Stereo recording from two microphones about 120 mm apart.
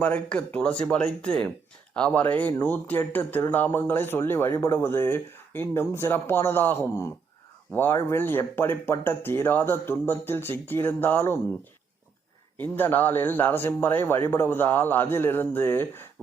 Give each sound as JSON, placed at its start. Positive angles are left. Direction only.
{"t": 0.0, "sound": "speech", "side_deg": 10}
{"t": 12.5, "sound": "speech", "side_deg": 15}